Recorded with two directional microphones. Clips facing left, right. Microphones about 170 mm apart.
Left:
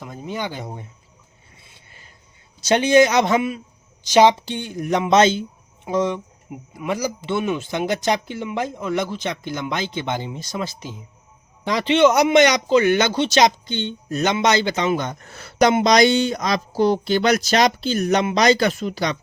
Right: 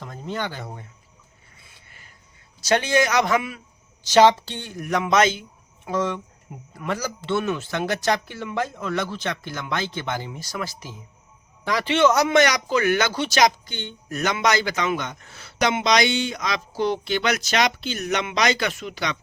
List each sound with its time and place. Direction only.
0.0 s speech: 10° left (ahead or behind)
1.5 s rub: 25° left (ahead or behind)
2.6 s a man's voice: 20° left (ahead or behind)